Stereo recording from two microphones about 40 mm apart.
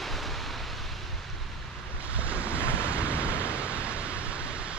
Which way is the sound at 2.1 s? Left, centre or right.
Right.